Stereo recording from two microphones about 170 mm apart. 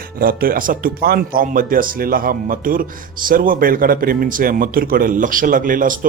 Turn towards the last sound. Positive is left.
turn(degrees=-50)  # may be behind; listen again after turning